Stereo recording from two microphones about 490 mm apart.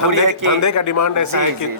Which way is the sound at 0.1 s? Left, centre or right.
Right.